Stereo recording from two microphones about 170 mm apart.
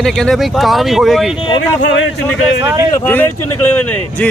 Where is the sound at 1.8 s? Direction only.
90° left.